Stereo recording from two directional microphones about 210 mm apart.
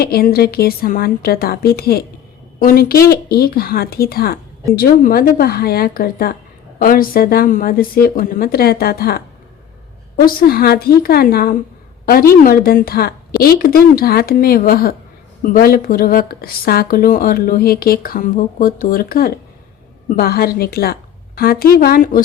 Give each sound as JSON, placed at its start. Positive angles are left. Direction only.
{"t": 0.0, "sound": "speech", "side_deg": 45}
{"t": 10.2, "sound": "speech", "side_deg": 45}